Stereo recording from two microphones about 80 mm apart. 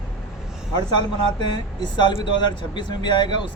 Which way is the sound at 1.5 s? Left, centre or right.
Left.